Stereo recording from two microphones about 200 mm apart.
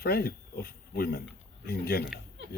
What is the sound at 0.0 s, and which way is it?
Speech, 50° left (ahead or behind).